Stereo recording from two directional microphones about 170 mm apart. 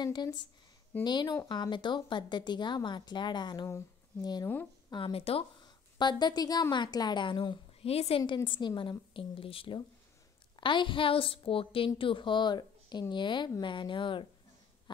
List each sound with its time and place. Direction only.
0.0 s a woman's voice: 25° left (ahead or behind)
4.5 s a sound: 10° left (ahead or behind)
4.9 s a woman's voice: 30° left (ahead or behind)
8.2 s a woman's voice: 25° left (ahead or behind)